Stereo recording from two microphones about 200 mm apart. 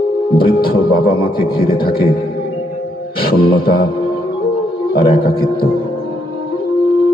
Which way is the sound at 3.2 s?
50° left (ahead or behind).